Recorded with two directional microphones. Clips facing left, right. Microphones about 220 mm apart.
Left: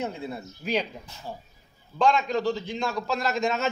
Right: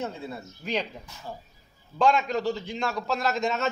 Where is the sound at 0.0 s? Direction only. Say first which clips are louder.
Left 2 dB; 15° left (ahead or behind).